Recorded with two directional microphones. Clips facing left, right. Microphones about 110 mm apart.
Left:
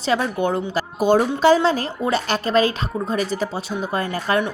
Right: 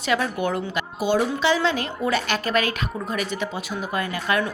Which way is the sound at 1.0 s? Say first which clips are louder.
Left 6 dB; 45° left (ahead or behind).